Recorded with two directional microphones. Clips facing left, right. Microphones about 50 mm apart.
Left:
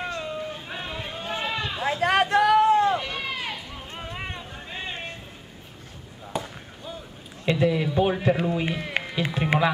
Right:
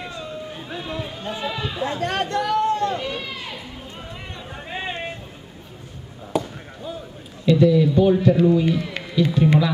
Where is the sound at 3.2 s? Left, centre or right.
Left.